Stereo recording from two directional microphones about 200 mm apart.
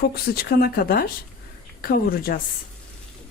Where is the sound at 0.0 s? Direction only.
50° left (ahead or behind).